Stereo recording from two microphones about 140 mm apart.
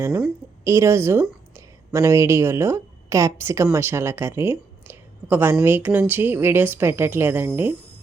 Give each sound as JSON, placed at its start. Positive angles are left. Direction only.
{"t": 0.6, "sound": "a woman's voice", "side_deg": -20}